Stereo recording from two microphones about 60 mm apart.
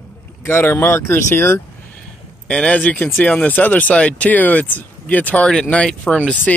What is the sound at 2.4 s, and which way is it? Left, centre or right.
Speech, centre.